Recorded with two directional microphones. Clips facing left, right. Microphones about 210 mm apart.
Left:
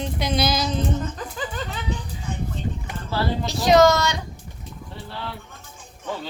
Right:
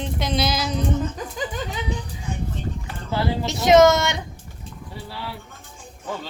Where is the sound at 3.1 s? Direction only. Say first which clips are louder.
Right 1 dB; 20° right (ahead or behind).